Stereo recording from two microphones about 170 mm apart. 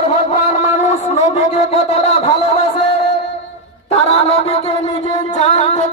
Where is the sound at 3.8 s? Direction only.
35° left (ahead or behind).